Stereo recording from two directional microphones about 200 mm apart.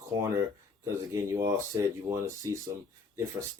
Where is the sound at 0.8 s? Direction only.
15° right (ahead or behind).